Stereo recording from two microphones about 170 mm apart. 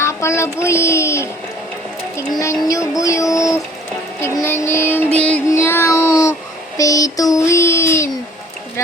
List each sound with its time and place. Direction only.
0.0 s speech: 15° left (ahead or behind)
2.4 s a sound: 20° left (ahead or behind)
5.5 s child singing: 15° left (ahead or behind)
6.7 s speech: 20° left (ahead or behind)